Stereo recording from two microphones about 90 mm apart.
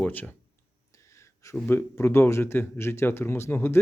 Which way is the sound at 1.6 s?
25° left (ahead or behind).